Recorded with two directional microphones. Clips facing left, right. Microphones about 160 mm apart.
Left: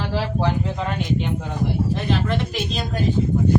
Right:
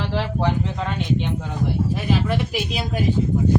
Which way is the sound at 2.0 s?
10° right (ahead or behind).